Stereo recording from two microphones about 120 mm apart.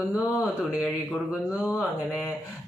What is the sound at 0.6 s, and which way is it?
Speech, 10° right (ahead or behind).